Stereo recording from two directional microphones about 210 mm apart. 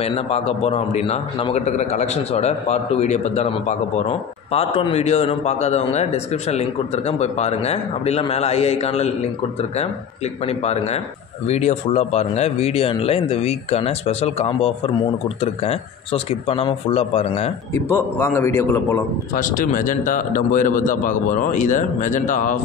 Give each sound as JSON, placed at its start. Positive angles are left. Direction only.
{"t": 0.0, "sound": "a man's voice", "side_deg": 30}
{"t": 10.4, "sound": "a man's voice", "side_deg": 30}
{"t": 17.7, "sound": "a man's voice", "side_deg": 10}
{"t": 19.3, "sound": "a man's voice", "side_deg": 40}